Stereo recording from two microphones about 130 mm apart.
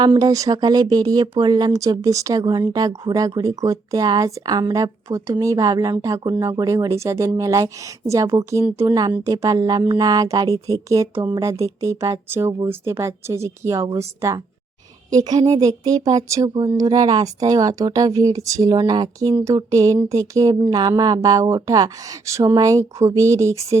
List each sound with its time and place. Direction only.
0.0 s speech: 30° right (ahead or behind)